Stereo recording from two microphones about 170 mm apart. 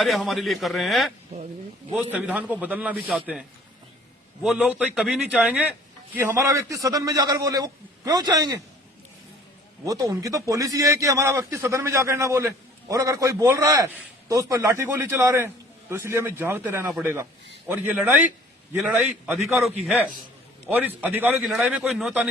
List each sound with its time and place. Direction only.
0.0 s a man's voice: centre (ahead or behind)
1.3 s speech: 40° right (ahead or behind)
1.9 s a man's voice: 10° right (ahead or behind)
4.4 s a man's voice: 5° right (ahead or behind)
6.1 s a man's voice: 15° right (ahead or behind)
9.8 s a man's voice: 20° right (ahead or behind)